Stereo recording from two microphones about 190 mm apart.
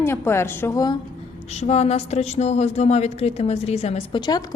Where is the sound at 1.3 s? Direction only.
35° left (ahead or behind).